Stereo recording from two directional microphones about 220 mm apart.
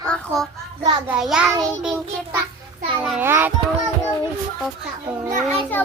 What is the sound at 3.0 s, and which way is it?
Speech, 5° right (ahead or behind).